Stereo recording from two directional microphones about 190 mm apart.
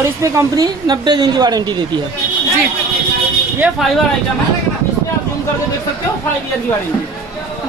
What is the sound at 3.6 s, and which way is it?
Speech, 5° right (ahead or behind).